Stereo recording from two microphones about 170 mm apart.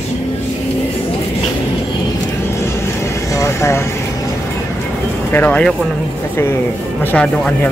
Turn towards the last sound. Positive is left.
turn(degrees=10)  # may be behind; listen again after turning